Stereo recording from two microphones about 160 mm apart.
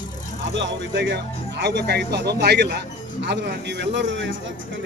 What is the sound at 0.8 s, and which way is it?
Speech, 90° right.